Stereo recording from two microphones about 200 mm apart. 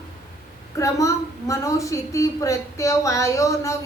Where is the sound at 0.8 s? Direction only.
15° left (ahead or behind).